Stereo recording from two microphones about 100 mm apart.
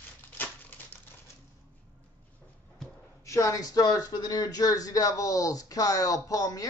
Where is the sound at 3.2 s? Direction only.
30° left (ahead or behind).